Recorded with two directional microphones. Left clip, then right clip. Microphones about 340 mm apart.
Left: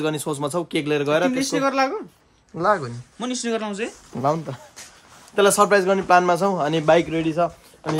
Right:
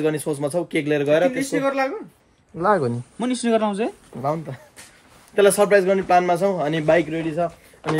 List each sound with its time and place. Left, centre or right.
0.0 s a man's voice: centre
2.6 s speech: centre
3.2 s speech: right
4.2 s a man's voice: centre